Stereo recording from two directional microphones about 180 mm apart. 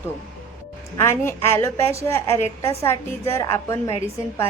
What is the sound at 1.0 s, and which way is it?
A woman's voice, 15° left (ahead or behind).